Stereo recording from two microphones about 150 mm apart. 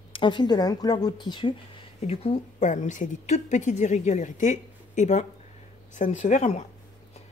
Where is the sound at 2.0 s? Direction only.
45° left (ahead or behind).